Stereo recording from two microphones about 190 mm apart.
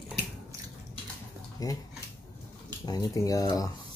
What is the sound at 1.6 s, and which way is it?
Speech, 20° left (ahead or behind).